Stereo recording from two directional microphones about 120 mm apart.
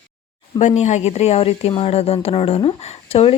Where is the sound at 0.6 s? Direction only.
75° left (ahead or behind); by 3.3 s 55° left (ahead or behind).